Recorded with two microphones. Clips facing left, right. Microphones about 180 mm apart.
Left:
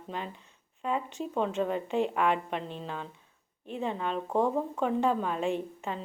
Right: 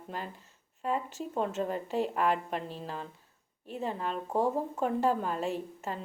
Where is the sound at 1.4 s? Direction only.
45° right (ahead or behind).